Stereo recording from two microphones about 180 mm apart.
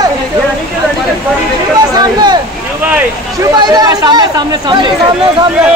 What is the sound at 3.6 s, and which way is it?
Speech, 20° right (ahead or behind).